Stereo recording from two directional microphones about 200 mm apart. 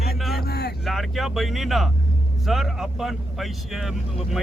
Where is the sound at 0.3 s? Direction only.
50° left (ahead or behind).